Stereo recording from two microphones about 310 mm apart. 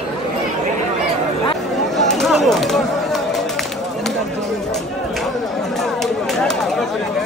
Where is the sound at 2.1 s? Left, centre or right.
Centre.